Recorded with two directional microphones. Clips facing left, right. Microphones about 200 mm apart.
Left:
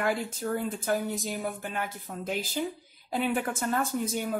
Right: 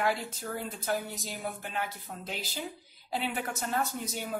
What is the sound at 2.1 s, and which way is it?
Speech, 50° left (ahead or behind).